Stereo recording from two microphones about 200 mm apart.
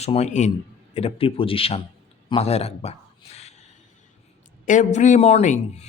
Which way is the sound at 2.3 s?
30° left (ahead or behind).